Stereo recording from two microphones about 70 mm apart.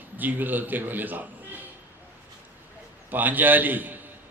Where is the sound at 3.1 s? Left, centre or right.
Right.